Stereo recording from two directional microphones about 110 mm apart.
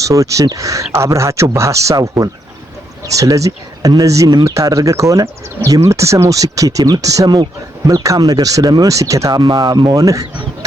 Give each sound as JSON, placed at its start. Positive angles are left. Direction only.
{"t": 0.0, "sound": "speech", "side_deg": -30}